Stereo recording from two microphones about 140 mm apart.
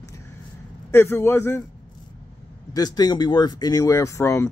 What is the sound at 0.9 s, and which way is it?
Speech, 15° left (ahead or behind).